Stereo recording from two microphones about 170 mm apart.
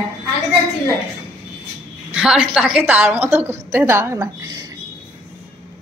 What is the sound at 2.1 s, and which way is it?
A woman's voice, 5° right (ahead or behind).